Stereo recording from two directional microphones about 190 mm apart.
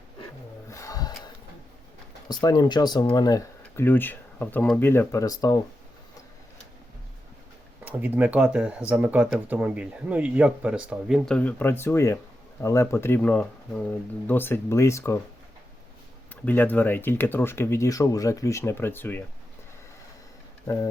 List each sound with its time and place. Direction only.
0.7 s a sound: 15° left (ahead or behind)
2.2 s speech: 20° left (ahead or behind)
7.9 s speech: 10° right (ahead or behind); by 15.2 s 15° left (ahead or behind)
16.3 s speech: 10° left (ahead or behind)